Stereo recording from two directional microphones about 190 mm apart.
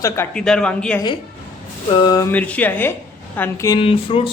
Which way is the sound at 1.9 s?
20° left (ahead or behind).